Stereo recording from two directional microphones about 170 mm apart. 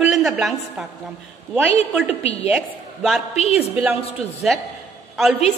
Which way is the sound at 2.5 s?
Centre (ahead or behind).